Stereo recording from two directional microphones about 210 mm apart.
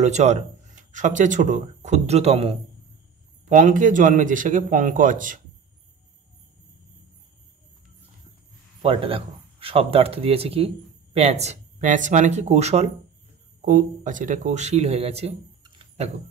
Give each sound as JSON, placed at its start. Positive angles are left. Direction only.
{"t": 0.0, "sound": "a man's voice", "side_deg": -30}
{"t": 8.8, "sound": "a man's voice", "side_deg": -25}